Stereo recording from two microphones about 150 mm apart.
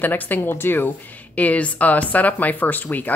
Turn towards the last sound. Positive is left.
turn(degrees=10)  # may be behind; listen again after turning